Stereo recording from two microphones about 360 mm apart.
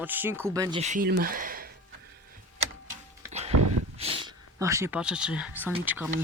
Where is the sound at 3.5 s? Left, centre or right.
Right.